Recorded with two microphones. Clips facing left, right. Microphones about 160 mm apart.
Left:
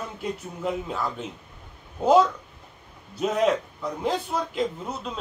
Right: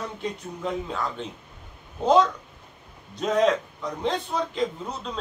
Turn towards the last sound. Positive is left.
turn(degrees=5)  # may be behind; listen again after turning